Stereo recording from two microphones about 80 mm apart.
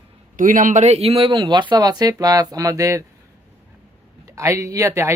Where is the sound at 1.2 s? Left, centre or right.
Right.